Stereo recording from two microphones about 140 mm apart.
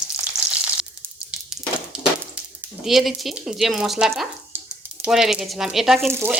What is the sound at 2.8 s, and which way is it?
Speech, centre (ahead or behind).